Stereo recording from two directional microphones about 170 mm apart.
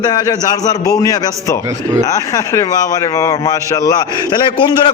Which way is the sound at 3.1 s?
20° left (ahead or behind).